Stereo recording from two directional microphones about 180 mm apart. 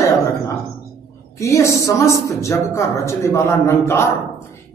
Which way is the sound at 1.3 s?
15° left (ahead or behind).